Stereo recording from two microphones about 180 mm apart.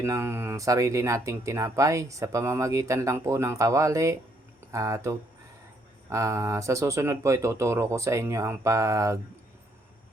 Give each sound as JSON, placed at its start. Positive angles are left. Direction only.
{"t": 0.0, "sound": "speech", "side_deg": -15}